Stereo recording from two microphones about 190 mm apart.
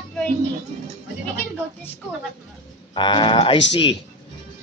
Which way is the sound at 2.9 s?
25° left (ahead or behind).